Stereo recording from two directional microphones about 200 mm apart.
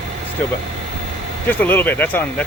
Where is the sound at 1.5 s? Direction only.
10° left (ahead or behind).